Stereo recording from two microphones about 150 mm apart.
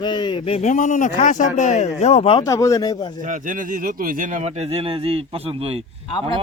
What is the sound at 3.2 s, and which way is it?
Speech, 60° right (ahead or behind).